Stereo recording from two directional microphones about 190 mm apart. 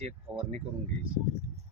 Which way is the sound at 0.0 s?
30° right (ahead or behind).